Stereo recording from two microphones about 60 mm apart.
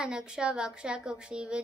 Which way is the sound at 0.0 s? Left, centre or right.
Centre.